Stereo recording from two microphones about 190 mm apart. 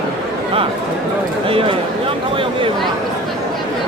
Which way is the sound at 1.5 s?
30° right (ahead or behind).